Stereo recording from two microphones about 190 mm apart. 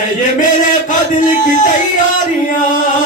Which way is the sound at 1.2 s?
40° left (ahead or behind).